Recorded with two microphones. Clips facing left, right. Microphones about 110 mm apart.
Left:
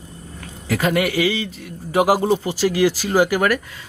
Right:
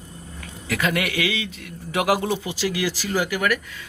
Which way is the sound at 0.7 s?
35° left (ahead or behind).